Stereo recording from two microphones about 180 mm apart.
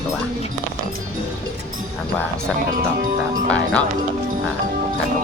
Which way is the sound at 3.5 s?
5° left (ahead or behind).